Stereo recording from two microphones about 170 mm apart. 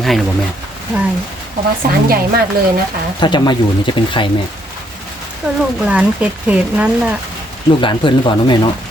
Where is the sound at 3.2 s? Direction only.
25° left (ahead or behind).